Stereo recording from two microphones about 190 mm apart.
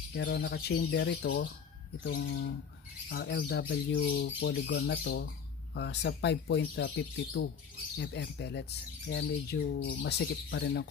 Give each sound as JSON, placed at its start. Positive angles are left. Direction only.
{"t": 0.1, "sound": "speech", "side_deg": 60}
{"t": 3.1, "sound": "speech", "side_deg": 70}
{"t": 5.8, "sound": "speech", "side_deg": 65}